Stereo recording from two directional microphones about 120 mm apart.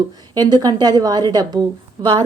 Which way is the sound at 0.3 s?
35° right (ahead or behind).